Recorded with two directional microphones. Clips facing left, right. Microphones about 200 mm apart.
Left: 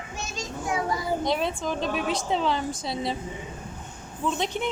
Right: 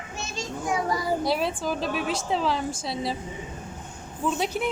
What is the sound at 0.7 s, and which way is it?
A child's voice, centre (ahead or behind).